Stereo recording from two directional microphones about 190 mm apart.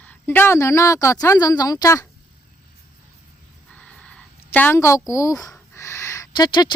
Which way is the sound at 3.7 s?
5° left (ahead or behind).